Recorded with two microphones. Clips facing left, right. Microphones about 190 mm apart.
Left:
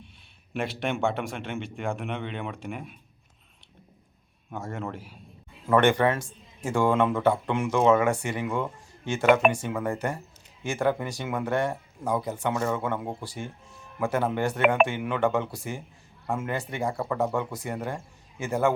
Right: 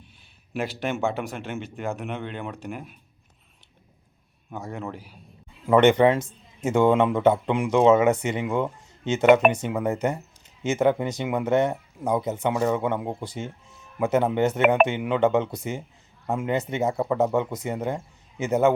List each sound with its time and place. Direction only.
0.5 s speech: 5° right (ahead or behind)
4.5 s speech: centre (ahead or behind)
5.6 s speech: 20° right (ahead or behind)